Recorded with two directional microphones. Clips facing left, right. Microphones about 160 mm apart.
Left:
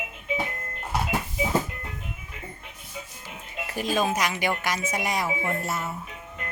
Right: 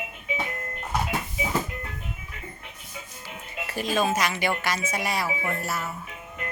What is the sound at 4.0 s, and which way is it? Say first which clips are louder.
A woman's voice: right 1 dB; 15° left (ahead or behind).